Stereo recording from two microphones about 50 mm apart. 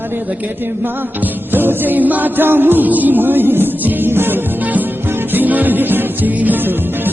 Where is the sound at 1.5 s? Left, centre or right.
Right.